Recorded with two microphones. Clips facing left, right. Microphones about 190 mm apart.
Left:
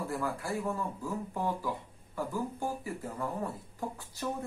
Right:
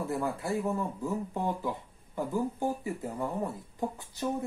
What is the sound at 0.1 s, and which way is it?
Speech, 20° right (ahead or behind).